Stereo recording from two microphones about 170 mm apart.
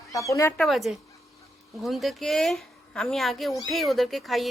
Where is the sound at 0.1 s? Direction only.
20° left (ahead or behind).